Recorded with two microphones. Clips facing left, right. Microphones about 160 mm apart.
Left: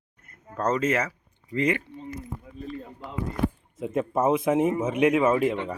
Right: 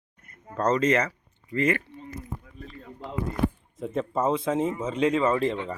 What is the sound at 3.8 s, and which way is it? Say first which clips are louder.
Speech: left 2 dB; 10° left (ahead or behind).